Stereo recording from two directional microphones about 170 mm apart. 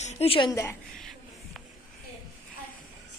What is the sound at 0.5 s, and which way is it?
Speech, 15° left (ahead or behind).